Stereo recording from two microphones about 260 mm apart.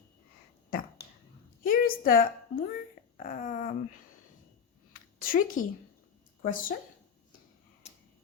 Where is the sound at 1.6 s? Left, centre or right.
Left.